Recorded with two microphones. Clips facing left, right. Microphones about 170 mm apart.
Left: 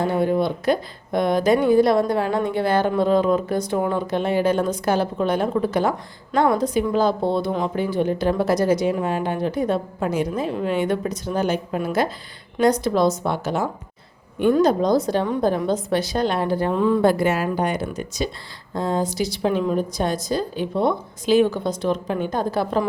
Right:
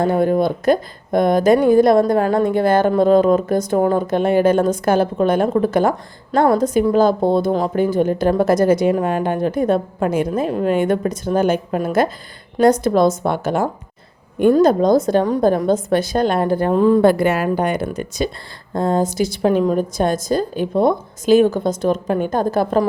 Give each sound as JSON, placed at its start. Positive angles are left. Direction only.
{"t": 0.0, "sound": "a woman's voice", "side_deg": -45}
{"t": 17.0, "sound": "a woman's voice", "side_deg": -60}